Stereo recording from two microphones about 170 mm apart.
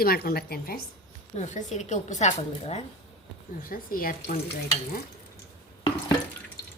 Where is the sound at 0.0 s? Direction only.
60° left (ahead or behind).